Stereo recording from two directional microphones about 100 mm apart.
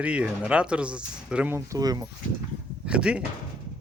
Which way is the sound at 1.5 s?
35° right (ahead or behind).